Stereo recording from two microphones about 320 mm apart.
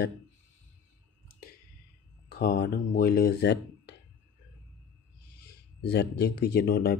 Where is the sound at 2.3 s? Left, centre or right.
Left.